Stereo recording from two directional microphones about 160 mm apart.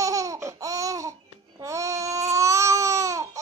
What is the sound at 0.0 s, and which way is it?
Laughter, 20° right (ahead or behind).